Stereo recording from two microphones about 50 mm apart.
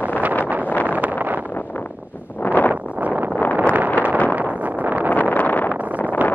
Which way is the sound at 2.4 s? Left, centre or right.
Left.